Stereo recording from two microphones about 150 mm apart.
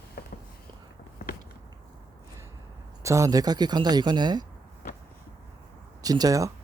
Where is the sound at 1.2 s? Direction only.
90° left.